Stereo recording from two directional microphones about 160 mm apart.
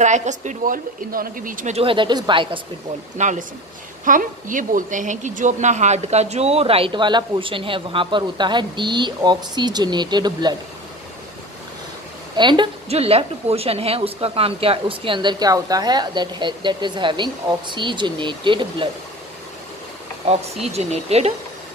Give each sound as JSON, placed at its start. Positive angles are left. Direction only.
{"t": 0.0, "sound": "a woman's voice", "side_deg": -50}
{"t": 1.8, "sound": "a woman's voice", "side_deg": -30}
{"t": 3.2, "sound": "a woman's voice", "side_deg": -50}
{"t": 12.4, "sound": "a woman's voice", "side_deg": -30}
{"t": 20.7, "sound": "a woman's voice", "side_deg": -40}